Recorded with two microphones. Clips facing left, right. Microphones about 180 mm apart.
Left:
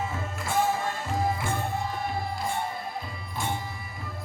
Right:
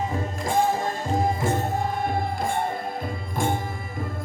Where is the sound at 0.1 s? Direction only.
40° right (ahead or behind).